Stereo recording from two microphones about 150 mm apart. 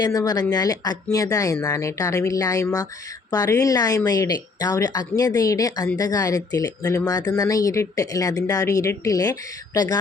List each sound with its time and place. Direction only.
0.0 s speech: 25° left (ahead or behind)